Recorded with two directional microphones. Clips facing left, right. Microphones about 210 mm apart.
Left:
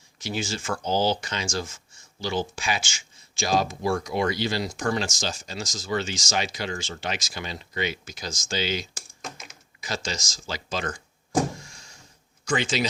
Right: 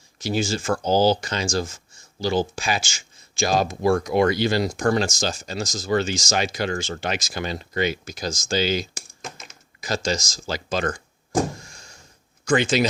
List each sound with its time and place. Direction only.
0.2 s speech: 35° right (ahead or behind)
3.4 s speech: 55° right (ahead or behind)
12.5 s speech: 50° right (ahead or behind)